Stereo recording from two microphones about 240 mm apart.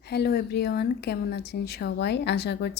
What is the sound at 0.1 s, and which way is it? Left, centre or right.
Speech, left.